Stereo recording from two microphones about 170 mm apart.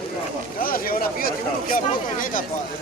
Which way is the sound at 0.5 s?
55° left (ahead or behind).